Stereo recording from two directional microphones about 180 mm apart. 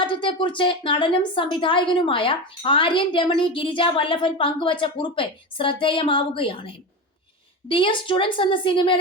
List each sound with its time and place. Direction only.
0.0 s a woman's voice: 30° left (ahead or behind)
7.7 s a woman's voice: 30° left (ahead or behind)